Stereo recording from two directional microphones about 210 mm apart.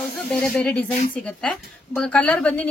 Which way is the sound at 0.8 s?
40° left (ahead or behind).